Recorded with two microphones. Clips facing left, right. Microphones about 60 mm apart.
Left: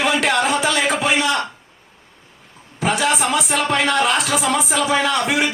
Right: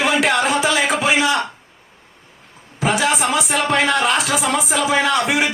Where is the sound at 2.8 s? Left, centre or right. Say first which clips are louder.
Right 1 dB; centre.